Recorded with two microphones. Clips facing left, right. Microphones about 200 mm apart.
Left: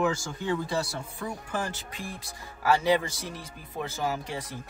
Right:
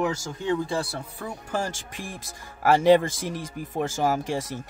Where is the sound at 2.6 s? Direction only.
50° right (ahead or behind).